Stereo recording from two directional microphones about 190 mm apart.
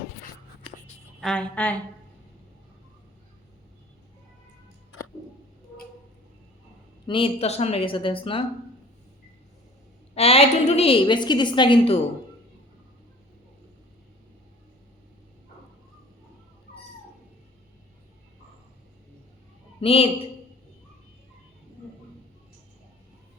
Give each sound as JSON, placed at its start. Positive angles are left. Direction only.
{"t": 1.2, "sound": "a woman's voice", "side_deg": 5}
{"t": 7.1, "sound": "a woman's voice", "side_deg": 30}
{"t": 10.2, "sound": "a woman's voice", "side_deg": 30}
{"t": 19.8, "sound": "a woman's voice", "side_deg": 30}